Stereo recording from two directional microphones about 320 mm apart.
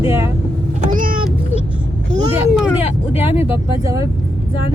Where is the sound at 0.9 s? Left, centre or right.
Right.